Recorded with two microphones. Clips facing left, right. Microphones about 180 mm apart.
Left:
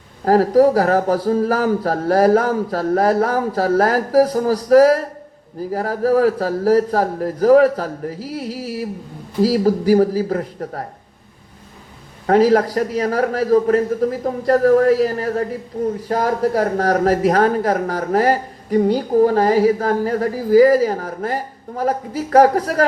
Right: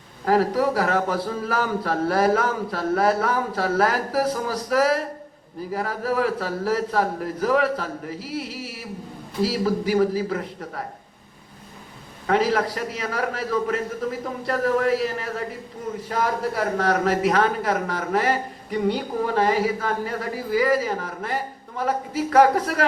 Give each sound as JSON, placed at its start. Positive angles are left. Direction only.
{"t": 0.3, "sound": "speech", "side_deg": 40}
{"t": 12.2, "sound": "speech", "side_deg": 40}